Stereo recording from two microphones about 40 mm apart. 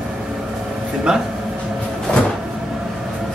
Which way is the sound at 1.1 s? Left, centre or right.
Centre.